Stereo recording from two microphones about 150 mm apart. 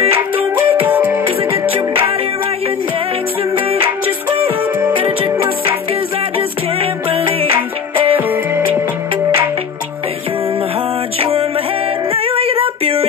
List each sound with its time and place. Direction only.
0.6 s music: 10° right (ahead or behind)
1.2 s music: 35° right (ahead or behind)
3.5 s music: 35° right (ahead or behind)
4.9 s music: 35° right (ahead or behind)
8.3 s music: 15° right (ahead or behind)
11.1 s music: 40° right (ahead or behind)
12.1 s a sound: 40° right (ahead or behind)